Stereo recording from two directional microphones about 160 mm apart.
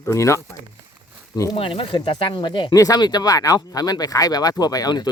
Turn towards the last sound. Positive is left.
turn(degrees=25)  # may be behind; listen again after turning